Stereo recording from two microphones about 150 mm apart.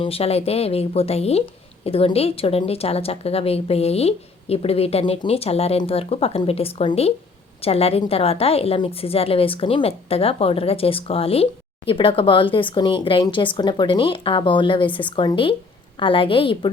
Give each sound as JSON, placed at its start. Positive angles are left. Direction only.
{"t": 0.0, "sound": "a woman's voice", "side_deg": 40}